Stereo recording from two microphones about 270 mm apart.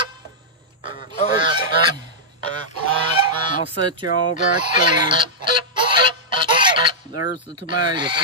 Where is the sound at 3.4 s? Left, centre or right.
Centre.